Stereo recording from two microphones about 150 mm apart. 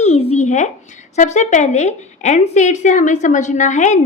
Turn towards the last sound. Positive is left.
turn(degrees=55)  # may be behind; listen again after turning